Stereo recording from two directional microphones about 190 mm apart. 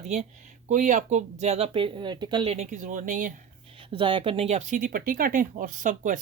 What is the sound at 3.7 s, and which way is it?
Speech, 30° right (ahead or behind).